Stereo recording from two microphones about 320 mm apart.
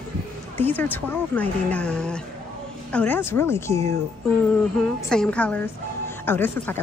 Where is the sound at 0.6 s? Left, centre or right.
Centre.